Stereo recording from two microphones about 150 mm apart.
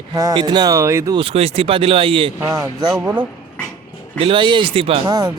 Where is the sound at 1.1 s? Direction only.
40° right (ahead or behind).